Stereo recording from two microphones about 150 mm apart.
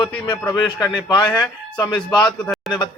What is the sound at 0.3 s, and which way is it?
Speech, 30° left (ahead or behind).